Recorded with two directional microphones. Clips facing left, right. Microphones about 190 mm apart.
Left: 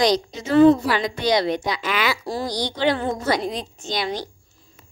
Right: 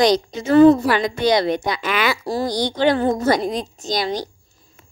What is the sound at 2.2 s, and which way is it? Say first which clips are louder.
Speech: right 4 dB; 45° right (ahead or behind).